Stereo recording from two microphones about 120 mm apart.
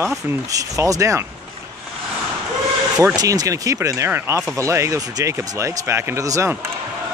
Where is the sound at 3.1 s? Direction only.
30° right (ahead or behind).